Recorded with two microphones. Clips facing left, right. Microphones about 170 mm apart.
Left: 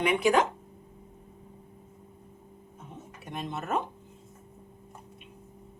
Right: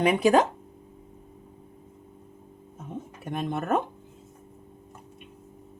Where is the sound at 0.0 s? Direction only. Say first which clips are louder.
Right 4 dB; 35° right (ahead or behind).